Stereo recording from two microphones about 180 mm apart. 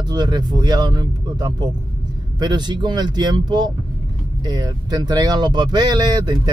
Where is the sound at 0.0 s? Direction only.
25° right (ahead or behind).